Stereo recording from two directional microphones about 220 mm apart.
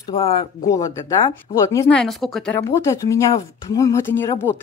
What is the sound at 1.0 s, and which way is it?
Speech, 15° left (ahead or behind).